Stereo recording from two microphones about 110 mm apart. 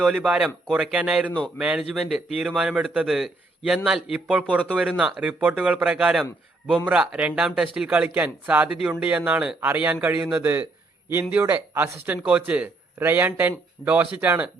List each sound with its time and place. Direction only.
0.0 s a man's voice: 10° right (ahead or behind)